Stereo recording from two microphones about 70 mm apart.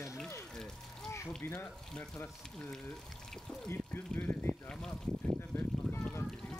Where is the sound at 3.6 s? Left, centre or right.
Left.